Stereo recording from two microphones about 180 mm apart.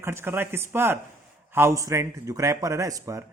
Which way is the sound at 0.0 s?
15° right (ahead or behind).